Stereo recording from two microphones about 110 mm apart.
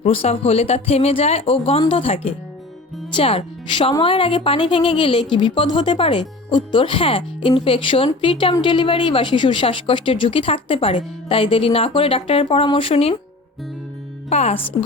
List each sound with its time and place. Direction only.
0.0 s a woman's voice: 65° left (ahead or behind)
14.3 s speech: 70° left (ahead or behind)